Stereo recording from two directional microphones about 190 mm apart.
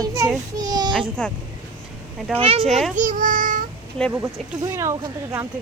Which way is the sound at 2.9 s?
45° right (ahead or behind).